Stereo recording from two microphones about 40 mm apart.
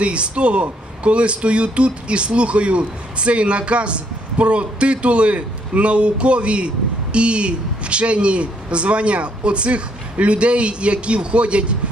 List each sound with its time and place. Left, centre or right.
0.0 s a man's voice: right